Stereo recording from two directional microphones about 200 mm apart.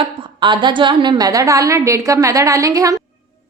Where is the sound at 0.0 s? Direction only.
25° right (ahead or behind).